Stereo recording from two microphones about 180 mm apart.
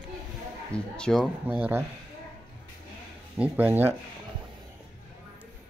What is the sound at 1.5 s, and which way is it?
Speech, 10° right (ahead or behind).